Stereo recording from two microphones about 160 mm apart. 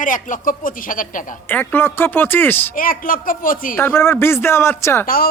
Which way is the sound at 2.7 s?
60° left (ahead or behind).